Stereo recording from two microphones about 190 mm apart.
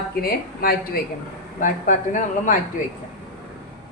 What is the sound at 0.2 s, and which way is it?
A woman's voice, 50° left (ahead or behind).